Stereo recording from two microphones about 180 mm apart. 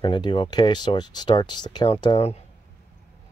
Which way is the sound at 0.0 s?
25° left (ahead or behind).